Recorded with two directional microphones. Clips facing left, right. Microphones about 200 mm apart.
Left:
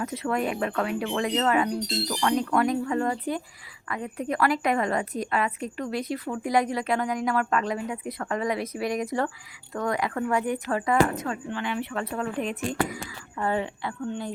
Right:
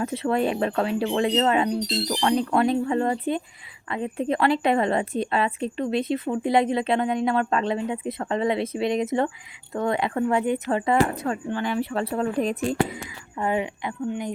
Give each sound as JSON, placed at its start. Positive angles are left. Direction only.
{"t": 0.0, "sound": "a woman's voice", "side_deg": -30}
{"t": 12.9, "sound": "speech", "side_deg": -15}